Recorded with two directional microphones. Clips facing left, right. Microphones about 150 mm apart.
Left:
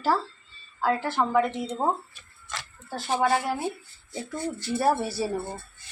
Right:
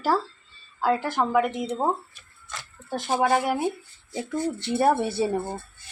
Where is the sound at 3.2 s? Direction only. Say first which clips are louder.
Right 3 dB; 20° right (ahead or behind).